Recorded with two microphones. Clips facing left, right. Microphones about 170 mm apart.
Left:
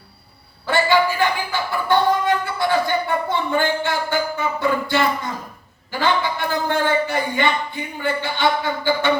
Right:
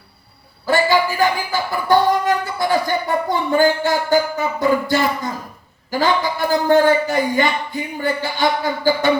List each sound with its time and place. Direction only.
0.6 s music: 40° right (ahead or behind)
5.9 s a man's voice: 40° right (ahead or behind)